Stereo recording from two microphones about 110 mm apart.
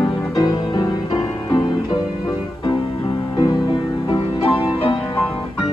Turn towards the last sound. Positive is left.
turn(degrees=50)  # may be behind; listen again after turning